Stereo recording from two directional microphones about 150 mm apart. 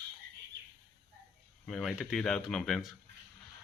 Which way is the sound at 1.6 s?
Centre (ahead or behind).